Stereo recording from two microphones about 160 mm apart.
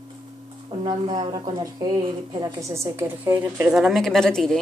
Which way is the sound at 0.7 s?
25° right (ahead or behind).